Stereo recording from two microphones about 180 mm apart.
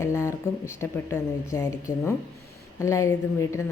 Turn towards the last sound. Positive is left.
turn(degrees=15)  # may be behind; listen again after turning